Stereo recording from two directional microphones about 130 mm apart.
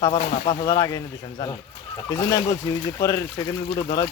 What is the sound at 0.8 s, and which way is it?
Speech, 30° left (ahead or behind).